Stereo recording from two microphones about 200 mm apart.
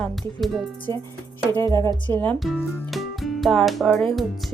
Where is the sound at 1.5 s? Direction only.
20° right (ahead or behind).